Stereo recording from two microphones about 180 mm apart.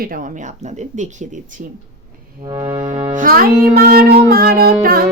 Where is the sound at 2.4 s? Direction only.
25° right (ahead or behind).